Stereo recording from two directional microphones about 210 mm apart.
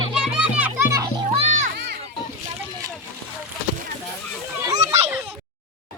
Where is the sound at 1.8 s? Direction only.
50° right (ahead or behind).